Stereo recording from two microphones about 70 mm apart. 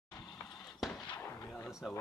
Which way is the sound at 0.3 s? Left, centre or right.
Centre.